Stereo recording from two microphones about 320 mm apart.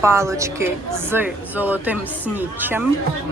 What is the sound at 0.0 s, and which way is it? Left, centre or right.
Speech, centre.